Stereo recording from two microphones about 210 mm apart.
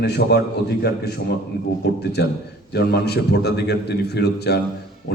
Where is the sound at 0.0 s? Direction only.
55° left (ahead or behind).